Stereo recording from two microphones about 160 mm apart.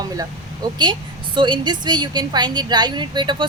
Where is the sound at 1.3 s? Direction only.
30° right (ahead or behind).